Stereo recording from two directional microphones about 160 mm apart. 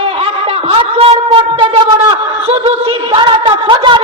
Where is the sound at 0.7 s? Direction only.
35° right (ahead or behind).